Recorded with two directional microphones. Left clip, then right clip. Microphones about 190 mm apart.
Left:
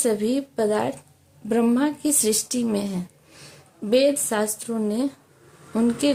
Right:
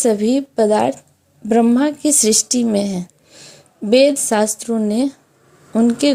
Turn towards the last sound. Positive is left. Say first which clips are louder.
# right 6 dB
turn(degrees=-30)  # may be behind; listen again after turning